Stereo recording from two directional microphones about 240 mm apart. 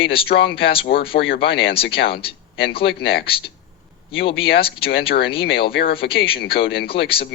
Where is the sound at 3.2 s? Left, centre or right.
Left.